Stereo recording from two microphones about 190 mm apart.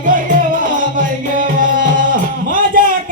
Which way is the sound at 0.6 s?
45° right (ahead or behind).